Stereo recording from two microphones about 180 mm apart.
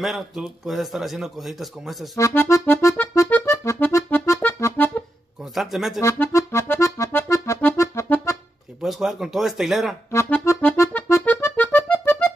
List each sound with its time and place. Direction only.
0.0 s speech: centre (ahead or behind)
2.1 s accordion: 15° left (ahead or behind)
5.4 s speech: centre (ahead or behind)
5.9 s music: 15° left (ahead or behind)
8.8 s speech: centre (ahead or behind)
10.1 s music: 15° left (ahead or behind)